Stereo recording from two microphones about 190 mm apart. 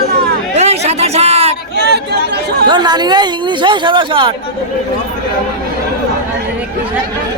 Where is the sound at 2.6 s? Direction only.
20° right (ahead or behind).